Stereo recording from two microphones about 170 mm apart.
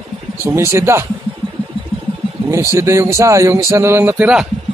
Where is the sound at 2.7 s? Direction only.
15° right (ahead or behind).